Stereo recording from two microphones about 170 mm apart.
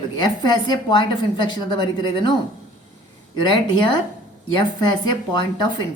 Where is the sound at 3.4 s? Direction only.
25° left (ahead or behind).